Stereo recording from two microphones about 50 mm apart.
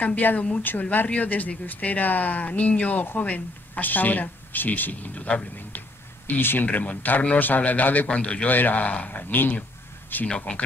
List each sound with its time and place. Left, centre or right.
0.0 s speech: left
6.2 s speech: left
6.6 s speech: left
8.2 s speech: left
8.5 s speech: left
9.3 s speech: left
10.2 s speech: left